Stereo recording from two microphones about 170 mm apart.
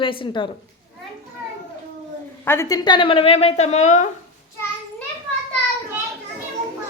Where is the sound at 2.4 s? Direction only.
15° left (ahead or behind); by 4.0 s 45° left (ahead or behind).